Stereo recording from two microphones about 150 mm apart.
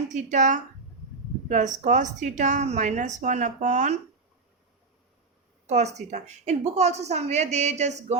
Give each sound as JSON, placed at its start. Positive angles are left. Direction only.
{"t": 0.1, "sound": "a woman's voice", "side_deg": -55}
{"t": 5.6, "sound": "a woman's voice", "side_deg": -50}